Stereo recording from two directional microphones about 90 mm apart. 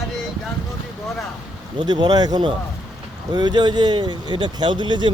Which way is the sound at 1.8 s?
50° right (ahead or behind).